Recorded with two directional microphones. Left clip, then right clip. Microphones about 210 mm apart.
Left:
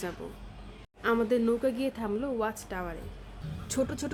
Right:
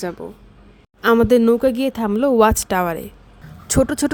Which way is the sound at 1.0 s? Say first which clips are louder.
Right 13 dB; 55° right (ahead or behind).